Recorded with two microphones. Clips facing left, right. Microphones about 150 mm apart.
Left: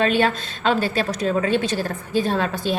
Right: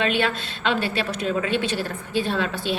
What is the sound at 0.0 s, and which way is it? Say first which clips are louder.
A woman's voice: left 4 dB; 40° left (ahead or behind).